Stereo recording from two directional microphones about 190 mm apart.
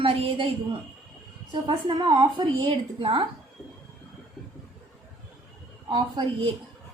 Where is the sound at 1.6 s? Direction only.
25° right (ahead or behind).